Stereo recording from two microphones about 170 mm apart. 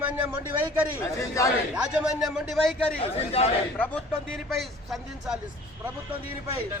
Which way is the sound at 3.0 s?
35° left (ahead or behind).